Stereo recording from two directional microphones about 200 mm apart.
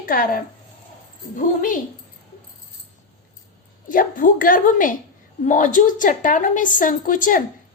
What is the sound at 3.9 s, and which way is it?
A woman's voice, 40° left (ahead or behind).